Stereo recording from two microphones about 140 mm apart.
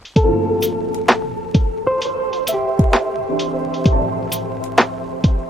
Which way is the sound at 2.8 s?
Centre (ahead or behind).